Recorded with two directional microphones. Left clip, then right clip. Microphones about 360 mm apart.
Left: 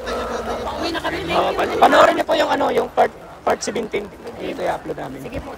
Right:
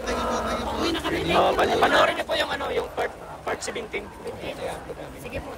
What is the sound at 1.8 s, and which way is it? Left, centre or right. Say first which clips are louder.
Speech: left 8 dB; centre.